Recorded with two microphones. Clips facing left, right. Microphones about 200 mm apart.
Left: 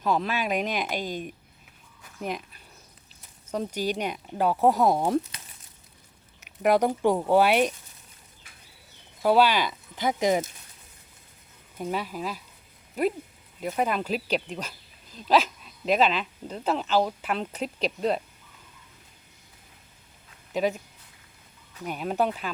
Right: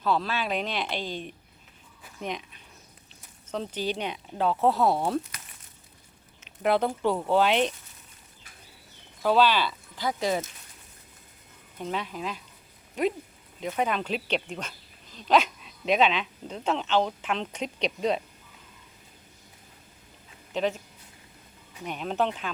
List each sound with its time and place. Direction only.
0.0 s speech: 15° left (ahead or behind)
2.0 s a sound: 5° right (ahead or behind)
3.5 s speech: 10° left (ahead or behind)
6.6 s speech: 15° left (ahead or behind)
9.2 s speech: 10° left (ahead or behind)
11.8 s speech: 10° left (ahead or behind)
13.6 s speech: 5° left (ahead or behind)
20.5 s speech: 10° left (ahead or behind)
21.8 s speech: 5° left (ahead or behind)